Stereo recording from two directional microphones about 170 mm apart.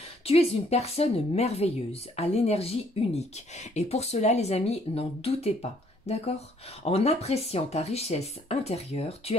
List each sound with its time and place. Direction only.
0.2 s speech: 35° left (ahead or behind)